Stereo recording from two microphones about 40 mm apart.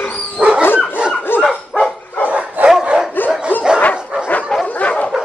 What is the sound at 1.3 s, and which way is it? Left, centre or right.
Dog, left.